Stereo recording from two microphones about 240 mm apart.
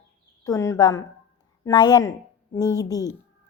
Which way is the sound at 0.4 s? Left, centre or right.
Centre.